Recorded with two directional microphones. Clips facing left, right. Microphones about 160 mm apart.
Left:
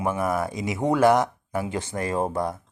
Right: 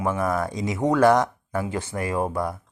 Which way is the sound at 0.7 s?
20° left (ahead or behind).